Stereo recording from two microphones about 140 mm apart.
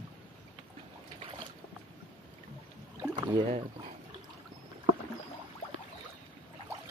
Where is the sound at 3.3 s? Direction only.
40° right (ahead or behind).